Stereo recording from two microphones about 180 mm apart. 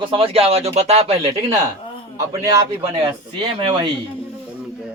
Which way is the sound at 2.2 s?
20° right (ahead or behind).